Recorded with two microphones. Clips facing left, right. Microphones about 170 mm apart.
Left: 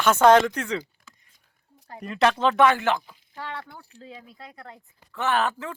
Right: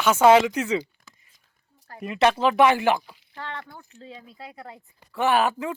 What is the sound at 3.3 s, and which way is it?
Speech, 10° left (ahead or behind).